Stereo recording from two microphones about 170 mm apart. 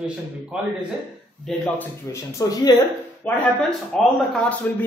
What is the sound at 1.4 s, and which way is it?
A man's voice, 10° left (ahead or behind).